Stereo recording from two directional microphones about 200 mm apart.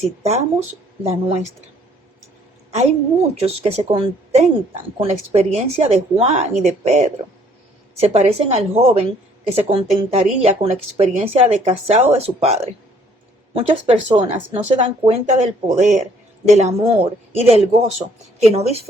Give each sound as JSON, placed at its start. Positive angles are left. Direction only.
{"t": 1.0, "sound": "speech", "side_deg": -30}
{"t": 2.7, "sound": "speech", "side_deg": -30}
{"t": 8.0, "sound": "speech", "side_deg": -30}